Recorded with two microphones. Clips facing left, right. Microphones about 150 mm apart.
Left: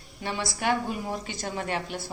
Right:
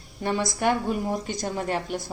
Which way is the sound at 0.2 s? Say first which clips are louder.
Right 5 dB; 45° right (ahead or behind).